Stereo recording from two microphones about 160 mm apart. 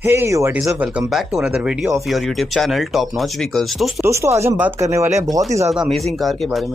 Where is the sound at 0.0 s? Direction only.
15° right (ahead or behind).